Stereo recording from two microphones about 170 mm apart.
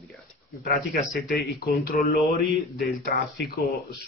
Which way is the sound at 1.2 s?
65° left (ahead or behind).